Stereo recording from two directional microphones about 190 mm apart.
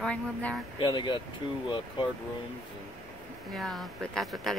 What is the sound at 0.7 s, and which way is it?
Speech, 25° left (ahead or behind).